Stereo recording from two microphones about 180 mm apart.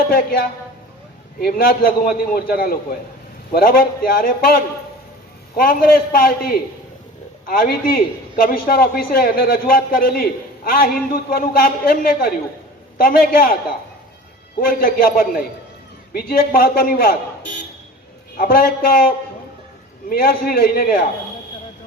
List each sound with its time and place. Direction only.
0.1 s a man's voice: 55° left (ahead or behind)
14.6 s a man's voice: 55° left (ahead or behind)